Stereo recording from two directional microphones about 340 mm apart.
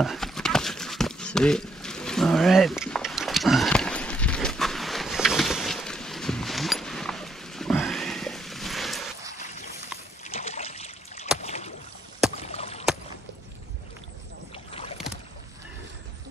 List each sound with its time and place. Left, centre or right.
0.0 s horse: centre
10.2 s trickle: centre
11.4 s rowboat: centre
12.4 s a sound: centre
14.5 s boat: centre